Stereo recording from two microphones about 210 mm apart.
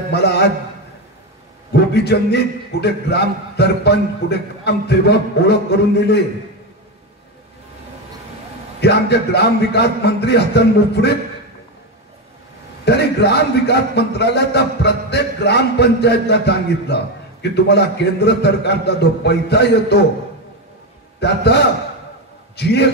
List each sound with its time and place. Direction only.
0.1 s a sound: 50° left (ahead or behind)
1.7 s a man's voice: 50° left (ahead or behind)
8.8 s a man's voice: 50° left (ahead or behind)
12.8 s a man's voice: 50° left (ahead or behind)
21.2 s a man's voice: 55° left (ahead or behind)